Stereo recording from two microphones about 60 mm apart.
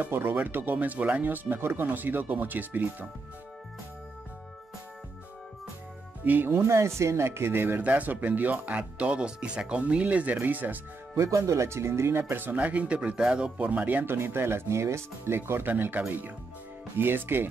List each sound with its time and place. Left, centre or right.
0.1 s speech: right
6.2 s speech: right
6.5 s speech: right
7.8 s speech: right
11.1 s speech: right
14.1 s speech: right